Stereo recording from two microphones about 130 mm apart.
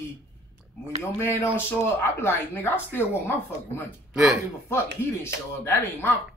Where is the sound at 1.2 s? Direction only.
20° left (ahead or behind).